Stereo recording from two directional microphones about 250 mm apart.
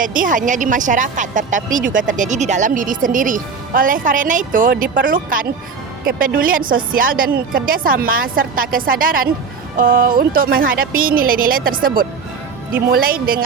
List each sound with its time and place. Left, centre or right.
0.0 s a woman's voice: right